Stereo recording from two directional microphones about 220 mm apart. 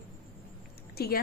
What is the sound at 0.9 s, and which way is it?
Speech, 45° left (ahead or behind).